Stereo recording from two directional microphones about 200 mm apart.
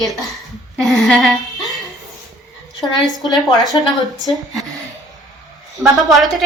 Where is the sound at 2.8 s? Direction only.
Centre (ahead or behind).